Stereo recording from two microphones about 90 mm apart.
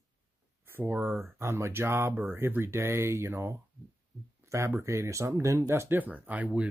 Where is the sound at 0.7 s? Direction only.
25° right (ahead or behind).